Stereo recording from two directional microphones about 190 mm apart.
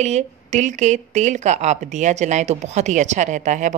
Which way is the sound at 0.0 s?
35° right (ahead or behind).